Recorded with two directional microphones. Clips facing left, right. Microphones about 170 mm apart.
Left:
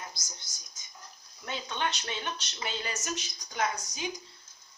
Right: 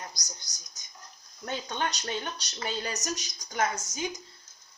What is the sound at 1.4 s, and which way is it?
A woman's voice, 45° right (ahead or behind).